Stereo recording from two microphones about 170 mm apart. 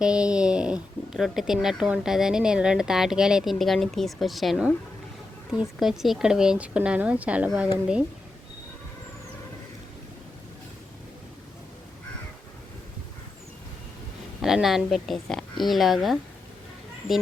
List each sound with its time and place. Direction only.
0.0 s speech: 5° right (ahead or behind)
14.4 s speech: centre (ahead or behind)